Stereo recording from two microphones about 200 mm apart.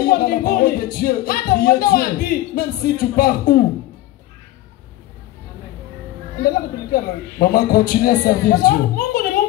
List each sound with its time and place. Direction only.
0.0 s speech: 45° left (ahead or behind)
6.4 s a man's voice: 50° left (ahead or behind)